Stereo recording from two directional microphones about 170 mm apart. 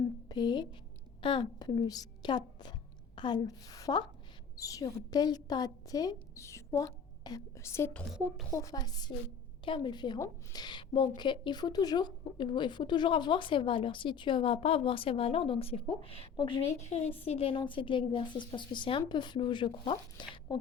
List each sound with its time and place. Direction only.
0.3 s a woman's voice: 25° left (ahead or behind)
17.2 s a woman's voice: 35° left (ahead or behind)